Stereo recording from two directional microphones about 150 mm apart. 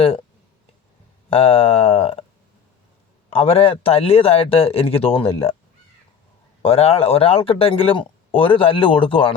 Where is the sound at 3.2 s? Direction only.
40° left (ahead or behind).